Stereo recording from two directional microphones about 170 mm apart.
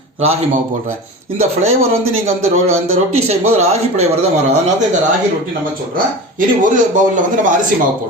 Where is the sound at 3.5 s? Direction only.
40° right (ahead or behind).